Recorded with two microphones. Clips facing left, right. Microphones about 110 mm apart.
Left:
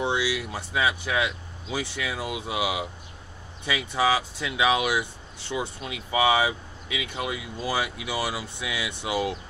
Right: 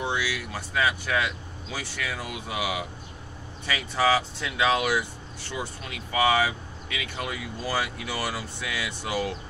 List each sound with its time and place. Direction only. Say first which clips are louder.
0.0 s speech: left 3 dB; 25° left (ahead or behind)